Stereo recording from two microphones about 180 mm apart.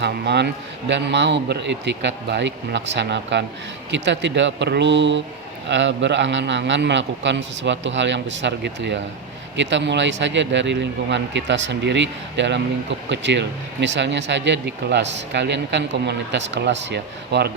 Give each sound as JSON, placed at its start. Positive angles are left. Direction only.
{"t": 0.0, "sound": "a man's voice", "side_deg": -70}
{"t": 9.6, "sound": "speech", "side_deg": -90}